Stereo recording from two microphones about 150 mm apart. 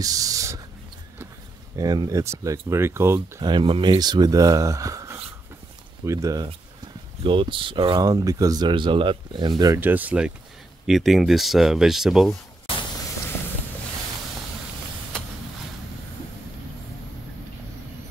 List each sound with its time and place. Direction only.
0.0 s a sound: 25° right (ahead or behind)
1.8 s speech: 25° right (ahead or behind)
3.4 s speech: 35° right (ahead or behind)
7.2 s speech: 35° right (ahead or behind)
9.8 s speech: 10° right (ahead or behind)